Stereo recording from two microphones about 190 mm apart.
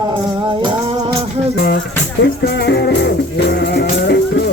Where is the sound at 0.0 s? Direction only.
25° right (ahead or behind).